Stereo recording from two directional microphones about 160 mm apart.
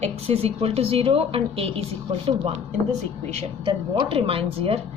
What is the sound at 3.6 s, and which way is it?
A woman's voice, 30° right (ahead or behind).